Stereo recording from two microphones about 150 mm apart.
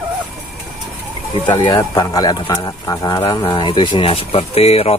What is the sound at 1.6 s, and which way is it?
Speech, 25° left (ahead or behind).